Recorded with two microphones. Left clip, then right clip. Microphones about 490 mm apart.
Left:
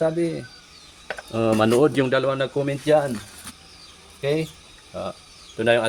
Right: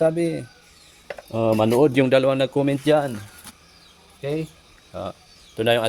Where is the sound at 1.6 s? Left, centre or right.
Right.